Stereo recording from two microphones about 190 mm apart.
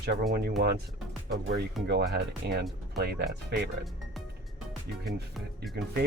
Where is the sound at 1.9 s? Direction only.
60° right (ahead or behind).